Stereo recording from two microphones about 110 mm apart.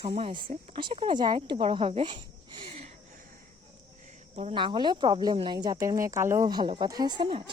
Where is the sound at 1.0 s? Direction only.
45° right (ahead or behind).